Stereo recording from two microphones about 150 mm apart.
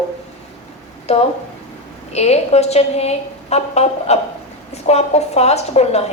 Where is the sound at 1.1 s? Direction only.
45° left (ahead or behind).